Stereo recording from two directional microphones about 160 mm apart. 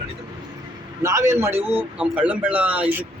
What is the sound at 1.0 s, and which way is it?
A man's voice, 20° right (ahead or behind).